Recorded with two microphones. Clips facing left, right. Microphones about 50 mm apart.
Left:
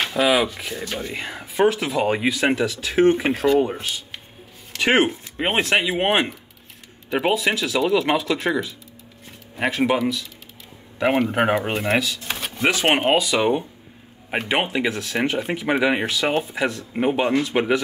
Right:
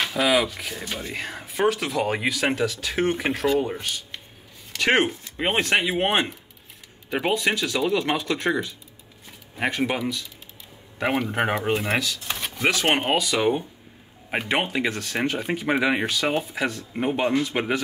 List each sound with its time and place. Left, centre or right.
0.0 s speech: centre
0.9 s speech: left
1.3 s speech: centre
4.7 s a man's voice: centre
11.7 s speech: centre
12.1 s drawer open or close: centre
13.2 s speech: centre
14.5 s a man's voice: centre